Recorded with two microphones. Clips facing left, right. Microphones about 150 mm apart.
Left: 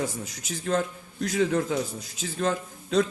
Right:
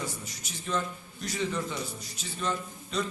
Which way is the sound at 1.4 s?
90° left.